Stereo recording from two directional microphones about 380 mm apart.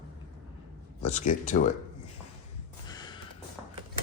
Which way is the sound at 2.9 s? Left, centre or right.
Centre.